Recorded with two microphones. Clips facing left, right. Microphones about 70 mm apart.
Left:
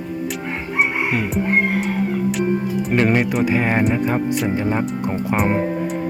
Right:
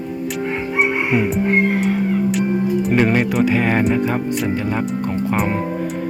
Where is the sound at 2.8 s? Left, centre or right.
Centre.